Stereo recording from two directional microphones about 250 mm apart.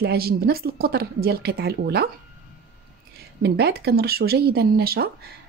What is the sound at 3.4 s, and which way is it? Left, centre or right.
Speech, right.